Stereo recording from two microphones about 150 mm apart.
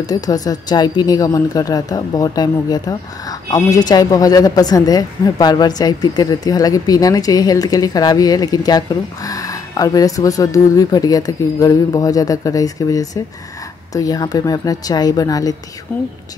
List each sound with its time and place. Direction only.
0.0 s a woman's voice: 25° left (ahead or behind)
15.9 s speech: 15° left (ahead or behind)